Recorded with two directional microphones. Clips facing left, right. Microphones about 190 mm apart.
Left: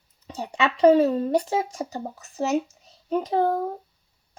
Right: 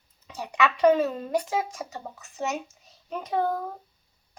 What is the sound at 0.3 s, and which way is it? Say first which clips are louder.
A woman's voice: even; 30° left (ahead or behind).